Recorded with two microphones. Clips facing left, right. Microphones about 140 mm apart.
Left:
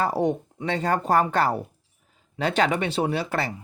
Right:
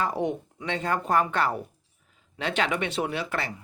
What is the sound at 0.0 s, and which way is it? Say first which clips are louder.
Speech: left 4 dB; 35° left (ahead or behind).